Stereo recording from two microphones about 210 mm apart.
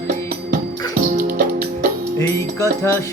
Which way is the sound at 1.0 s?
40° right (ahead or behind).